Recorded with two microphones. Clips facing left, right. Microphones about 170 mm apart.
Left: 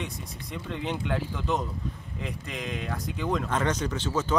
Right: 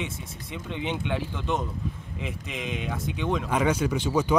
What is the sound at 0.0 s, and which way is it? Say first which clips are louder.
Speech: right 2 dB; centre (ahead or behind).